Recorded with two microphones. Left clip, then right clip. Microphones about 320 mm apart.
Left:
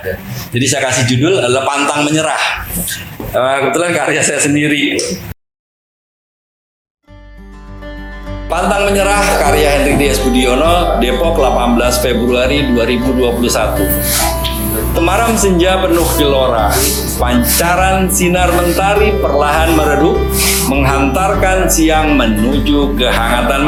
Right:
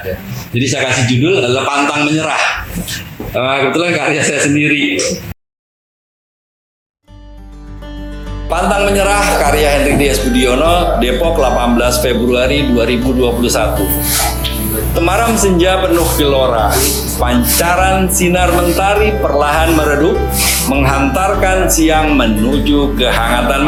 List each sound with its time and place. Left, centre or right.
0.5 s a man's voice: left
3.5 s a man's voice: left
8.4 s speech: centre